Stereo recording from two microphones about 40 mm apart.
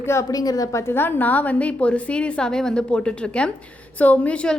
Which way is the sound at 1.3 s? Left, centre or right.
Left.